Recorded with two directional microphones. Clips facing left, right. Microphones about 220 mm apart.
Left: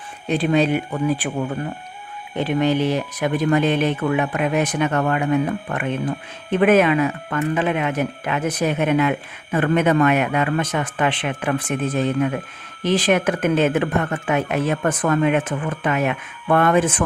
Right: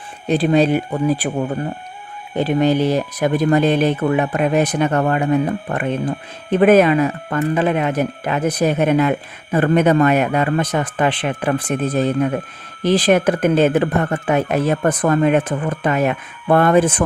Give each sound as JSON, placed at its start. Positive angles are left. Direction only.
{"t": 0.3, "sound": "speech", "side_deg": -35}